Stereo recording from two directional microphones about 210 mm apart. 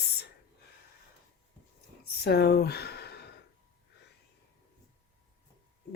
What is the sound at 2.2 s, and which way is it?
Speech, 50° left (ahead or behind).